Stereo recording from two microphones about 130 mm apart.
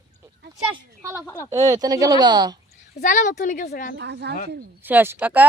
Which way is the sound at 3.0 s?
80° left.